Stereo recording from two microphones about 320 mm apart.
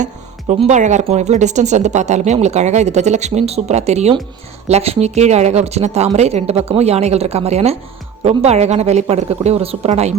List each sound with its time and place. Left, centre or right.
0.0 s speech: right